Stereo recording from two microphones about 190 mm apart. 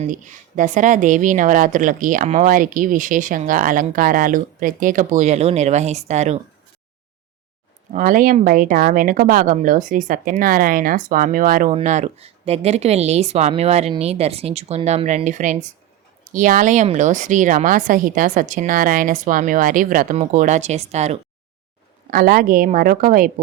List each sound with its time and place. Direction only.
0.0 s a woman's voice: 40° right (ahead or behind)
7.9 s a woman's voice: 45° right (ahead or behind)
11.7 s a woman's voice: 35° right (ahead or behind)
22.1 s a woman's voice: 50° right (ahead or behind)